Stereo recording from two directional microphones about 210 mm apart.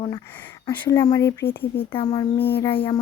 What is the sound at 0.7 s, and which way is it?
Speech, 15° left (ahead or behind).